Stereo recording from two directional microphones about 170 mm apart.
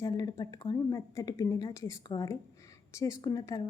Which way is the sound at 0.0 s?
20° left (ahead or behind).